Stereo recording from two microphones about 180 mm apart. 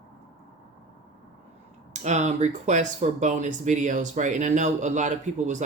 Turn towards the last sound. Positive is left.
turn(degrees=-40)  # may be behind; listen again after turning